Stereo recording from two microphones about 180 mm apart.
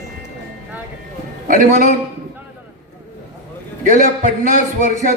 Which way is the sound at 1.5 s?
45° right (ahead or behind).